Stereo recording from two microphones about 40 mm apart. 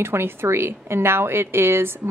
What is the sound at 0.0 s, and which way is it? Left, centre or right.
A woman's voice, right.